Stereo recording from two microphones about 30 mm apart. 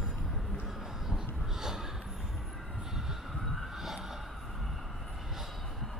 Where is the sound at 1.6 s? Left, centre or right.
Centre.